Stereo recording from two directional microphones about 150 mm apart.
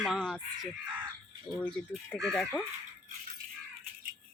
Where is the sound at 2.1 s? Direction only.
Centre (ahead or behind).